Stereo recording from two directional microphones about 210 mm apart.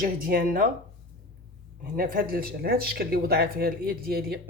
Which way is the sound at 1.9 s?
45° right (ahead or behind).